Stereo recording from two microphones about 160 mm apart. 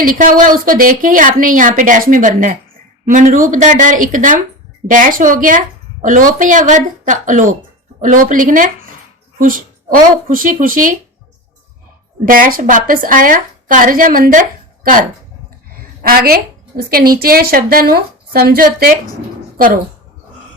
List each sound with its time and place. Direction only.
0.0 s a woman's voice: 60° right (ahead or behind)
12.2 s a woman's voice: 60° right (ahead or behind)
16.0 s a woman's voice: 70° right (ahead or behind)